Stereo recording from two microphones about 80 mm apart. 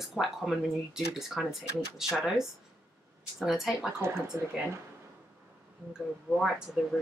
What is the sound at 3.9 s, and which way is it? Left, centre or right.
Speech, right.